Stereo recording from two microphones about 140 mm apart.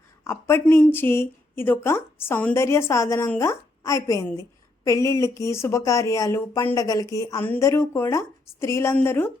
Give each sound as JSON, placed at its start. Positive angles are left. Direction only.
{"t": 0.3, "sound": "a woman's voice", "side_deg": 20}